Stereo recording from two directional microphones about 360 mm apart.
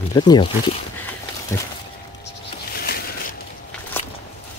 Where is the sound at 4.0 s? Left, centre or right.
Centre.